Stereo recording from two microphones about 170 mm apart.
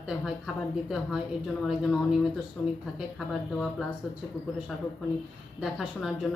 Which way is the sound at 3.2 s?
Centre (ahead or behind).